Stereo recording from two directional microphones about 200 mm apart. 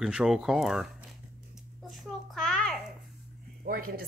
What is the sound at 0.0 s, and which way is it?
Speech, centre (ahead or behind).